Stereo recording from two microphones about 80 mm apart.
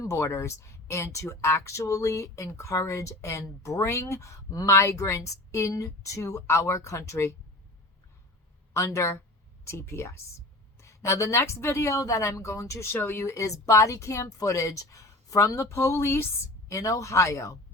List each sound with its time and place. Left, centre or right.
0.0 s speech: left
8.7 s speech: left